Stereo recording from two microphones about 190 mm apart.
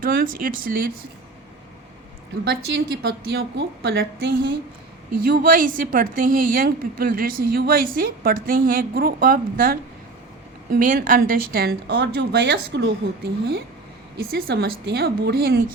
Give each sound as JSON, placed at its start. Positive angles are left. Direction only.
{"t": 0.0, "sound": "a woman's voice", "side_deg": -50}
{"t": 2.4, "sound": "a woman's voice", "side_deg": -55}